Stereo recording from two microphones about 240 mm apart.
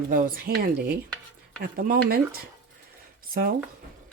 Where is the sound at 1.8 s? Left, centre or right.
Right.